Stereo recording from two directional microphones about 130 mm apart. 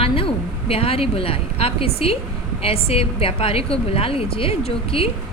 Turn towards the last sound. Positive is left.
turn(degrees=45)  # may be behind; listen again after turning